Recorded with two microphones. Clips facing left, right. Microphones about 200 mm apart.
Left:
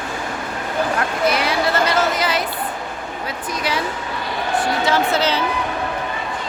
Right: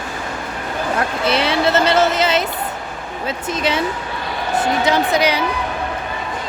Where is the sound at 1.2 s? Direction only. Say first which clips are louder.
Right 2 dB; 25° right (ahead or behind).